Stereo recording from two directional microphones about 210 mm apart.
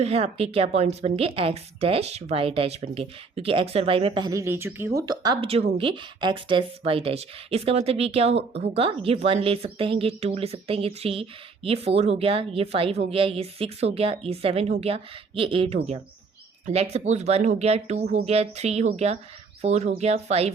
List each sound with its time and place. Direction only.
0.0 s speech: 30° right (ahead or behind)